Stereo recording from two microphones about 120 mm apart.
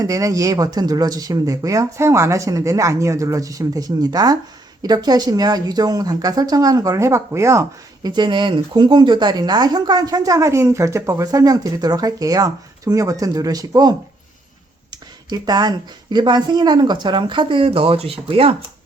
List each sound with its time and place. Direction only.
0.0 s speech: 30° right (ahead or behind)
8.1 s speech: 40° right (ahead or behind)
15.3 s speech: 35° right (ahead or behind); by 18.5 s 50° right (ahead or behind)